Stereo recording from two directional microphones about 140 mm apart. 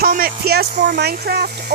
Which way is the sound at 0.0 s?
90° right.